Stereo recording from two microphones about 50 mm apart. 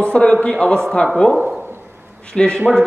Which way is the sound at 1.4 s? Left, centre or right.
Right.